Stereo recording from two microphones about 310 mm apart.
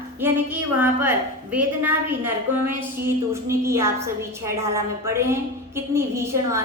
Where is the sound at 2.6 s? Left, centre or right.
Centre.